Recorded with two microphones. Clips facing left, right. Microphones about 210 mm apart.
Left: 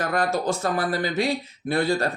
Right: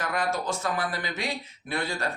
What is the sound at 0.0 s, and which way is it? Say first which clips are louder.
Speech: left 5 dB; 40° left (ahead or behind).